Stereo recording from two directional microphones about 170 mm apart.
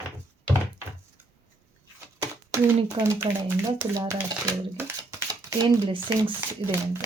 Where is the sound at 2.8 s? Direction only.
15° right (ahead or behind).